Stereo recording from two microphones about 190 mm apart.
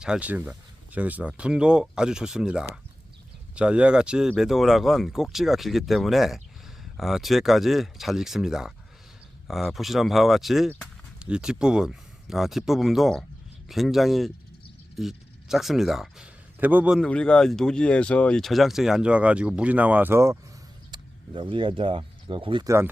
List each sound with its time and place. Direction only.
0.0 s speech: 5° right (ahead or behind)
20.9 s speech: 25° right (ahead or behind)